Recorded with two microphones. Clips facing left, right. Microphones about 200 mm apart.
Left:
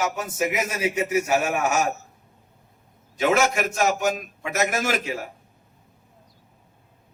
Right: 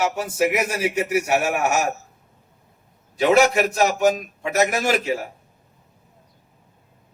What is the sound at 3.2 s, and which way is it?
A man's voice, 35° right (ahead or behind).